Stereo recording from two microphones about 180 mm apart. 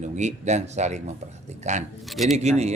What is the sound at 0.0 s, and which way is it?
Speech, 40° right (ahead or behind).